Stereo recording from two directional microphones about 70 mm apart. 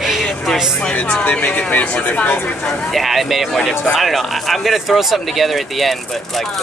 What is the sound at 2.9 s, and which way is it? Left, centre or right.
Speech, centre.